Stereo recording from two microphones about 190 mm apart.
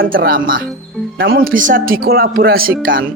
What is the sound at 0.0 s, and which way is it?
Speech, 50° right (ahead or behind).